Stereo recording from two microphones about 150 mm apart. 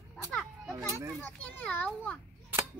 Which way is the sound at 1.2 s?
10° left (ahead or behind).